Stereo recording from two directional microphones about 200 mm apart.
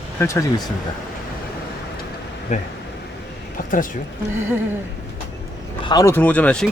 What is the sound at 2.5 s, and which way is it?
Speech, 35° left (ahead or behind).